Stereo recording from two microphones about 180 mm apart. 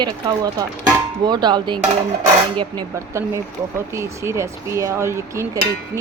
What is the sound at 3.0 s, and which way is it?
Speech, 15° right (ahead or behind).